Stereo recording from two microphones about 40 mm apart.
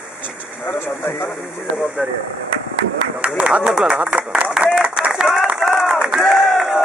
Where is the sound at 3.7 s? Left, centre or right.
Centre.